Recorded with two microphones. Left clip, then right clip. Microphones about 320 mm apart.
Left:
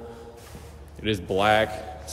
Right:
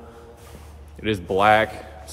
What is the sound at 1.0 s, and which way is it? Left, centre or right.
Speech, right.